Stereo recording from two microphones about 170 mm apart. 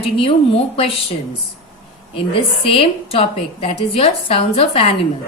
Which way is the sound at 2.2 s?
30° left (ahead or behind).